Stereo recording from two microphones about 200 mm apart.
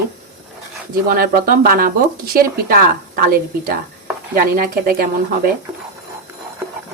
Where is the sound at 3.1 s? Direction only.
45° right (ahead or behind).